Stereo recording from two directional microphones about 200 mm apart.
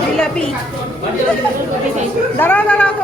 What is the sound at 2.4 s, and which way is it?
Speech, 10° left (ahead or behind).